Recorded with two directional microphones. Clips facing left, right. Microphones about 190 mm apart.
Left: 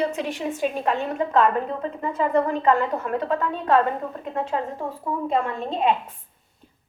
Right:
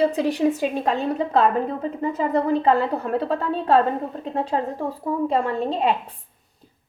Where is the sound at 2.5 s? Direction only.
35° right (ahead or behind).